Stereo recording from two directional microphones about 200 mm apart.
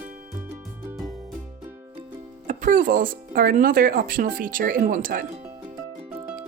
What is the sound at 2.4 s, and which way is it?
Speech, 40° right (ahead or behind).